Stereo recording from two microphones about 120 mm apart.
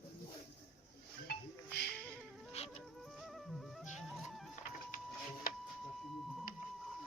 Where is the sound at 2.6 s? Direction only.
65° left (ahead or behind).